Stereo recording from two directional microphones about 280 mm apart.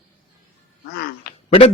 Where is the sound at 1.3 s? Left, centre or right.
Left.